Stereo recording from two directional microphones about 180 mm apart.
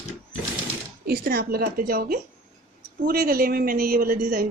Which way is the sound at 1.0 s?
60° right (ahead or behind).